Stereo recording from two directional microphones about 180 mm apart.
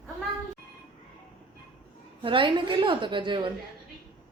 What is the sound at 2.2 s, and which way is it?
A woman's voice, 30° right (ahead or behind).